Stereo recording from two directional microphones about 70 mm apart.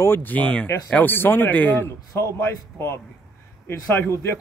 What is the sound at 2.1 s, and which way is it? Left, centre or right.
Speech, left.